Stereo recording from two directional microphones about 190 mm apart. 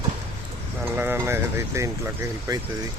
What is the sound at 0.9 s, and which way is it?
Speech, 10° right (ahead or behind).